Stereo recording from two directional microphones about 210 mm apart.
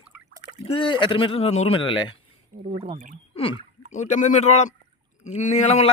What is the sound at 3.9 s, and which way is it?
Speech, 35° left (ahead or behind).